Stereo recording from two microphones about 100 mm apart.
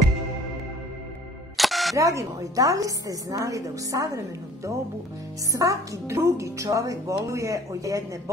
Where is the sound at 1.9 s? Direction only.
35° right (ahead or behind).